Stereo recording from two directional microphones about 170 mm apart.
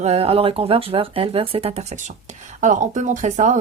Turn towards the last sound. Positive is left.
turn(degrees=-45)  # may be behind; listen again after turning